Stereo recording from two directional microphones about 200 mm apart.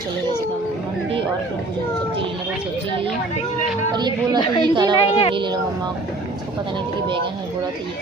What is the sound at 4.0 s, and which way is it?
Speech, 20° right (ahead or behind).